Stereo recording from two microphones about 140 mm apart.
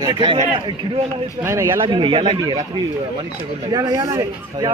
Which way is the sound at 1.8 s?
35° right (ahead or behind).